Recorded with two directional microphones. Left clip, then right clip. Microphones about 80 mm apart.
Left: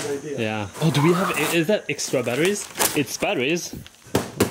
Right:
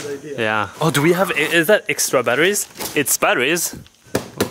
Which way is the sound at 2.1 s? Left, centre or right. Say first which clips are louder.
Right 7 dB; left.